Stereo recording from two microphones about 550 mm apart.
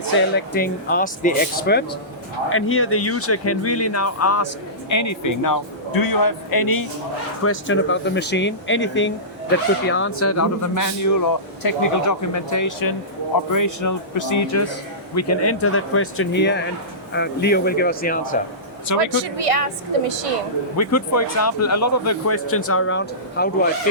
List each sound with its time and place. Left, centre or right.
0.0 s speech: centre; by 6.8 s left
7.4 s speech: left
18.9 s speech: right
20.7 s speech: left